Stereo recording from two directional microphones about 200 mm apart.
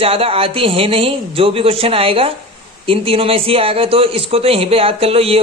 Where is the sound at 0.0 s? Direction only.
30° right (ahead or behind).